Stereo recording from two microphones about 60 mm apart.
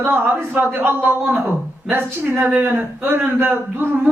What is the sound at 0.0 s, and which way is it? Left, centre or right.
A woman's voice, right.